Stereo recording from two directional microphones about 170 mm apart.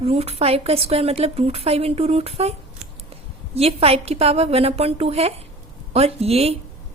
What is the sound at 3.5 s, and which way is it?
A woman's voice, 35° right (ahead or behind).